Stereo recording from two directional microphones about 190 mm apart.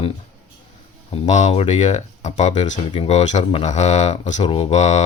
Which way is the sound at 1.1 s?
40° left (ahead or behind).